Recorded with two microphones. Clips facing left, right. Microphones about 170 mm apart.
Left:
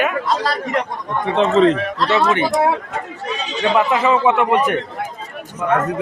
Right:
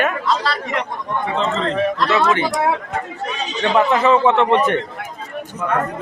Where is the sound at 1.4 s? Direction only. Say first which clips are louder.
Left 10 dB; 65° left (ahead or behind).